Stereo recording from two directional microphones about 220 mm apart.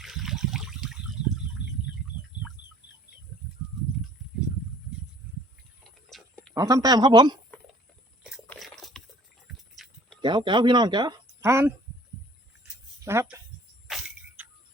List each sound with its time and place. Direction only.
0.0 s water: centre (ahead or behind)
6.1 s tick-tock: centre (ahead or behind)
6.5 s speech: 15° right (ahead or behind)
8.4 s biting: centre (ahead or behind)
9.7 s a sound: centre (ahead or behind)
10.2 s speech: 20° right (ahead or behind)
13.1 s speech: 10° right (ahead or behind)
13.8 s a sound: centre (ahead or behind)